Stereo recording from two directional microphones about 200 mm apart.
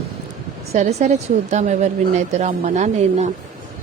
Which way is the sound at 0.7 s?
35° right (ahead or behind).